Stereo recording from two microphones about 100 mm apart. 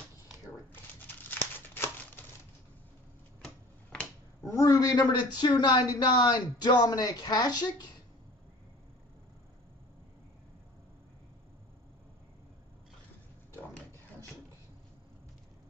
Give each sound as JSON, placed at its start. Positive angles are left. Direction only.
{"t": 1.0, "sound": "crumpling", "side_deg": 20}
{"t": 3.4, "sound": "tick-tock", "side_deg": 10}
{"t": 4.5, "sound": "speech", "side_deg": 35}